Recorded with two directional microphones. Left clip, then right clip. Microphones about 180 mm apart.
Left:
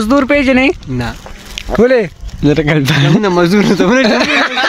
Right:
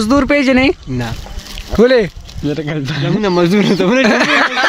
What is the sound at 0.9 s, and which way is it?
Speech, 15° left (ahead or behind).